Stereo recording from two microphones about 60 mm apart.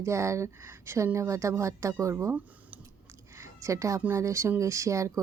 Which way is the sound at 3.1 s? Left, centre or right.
Right.